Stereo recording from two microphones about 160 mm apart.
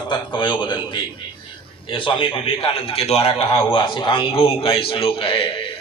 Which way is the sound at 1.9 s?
35° left (ahead or behind).